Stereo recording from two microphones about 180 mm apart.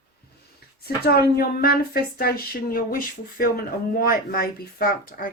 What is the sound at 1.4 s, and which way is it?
Speech, 60° left (ahead or behind).